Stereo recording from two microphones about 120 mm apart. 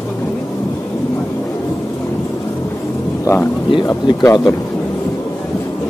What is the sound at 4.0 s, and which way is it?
Speech, 35° left (ahead or behind).